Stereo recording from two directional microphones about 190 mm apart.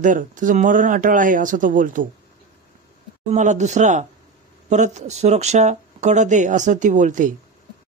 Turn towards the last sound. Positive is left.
turn(degrees=-40)  # may be behind; listen again after turning